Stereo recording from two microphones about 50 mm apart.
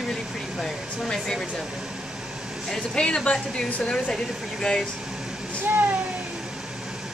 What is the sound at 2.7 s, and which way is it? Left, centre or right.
A woman's voice, centre.